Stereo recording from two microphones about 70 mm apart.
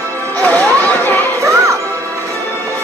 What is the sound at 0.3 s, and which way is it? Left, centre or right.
Music, left.